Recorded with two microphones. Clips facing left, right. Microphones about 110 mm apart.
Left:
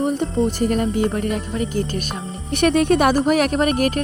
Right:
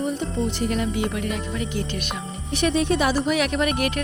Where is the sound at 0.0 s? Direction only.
45° left (ahead or behind).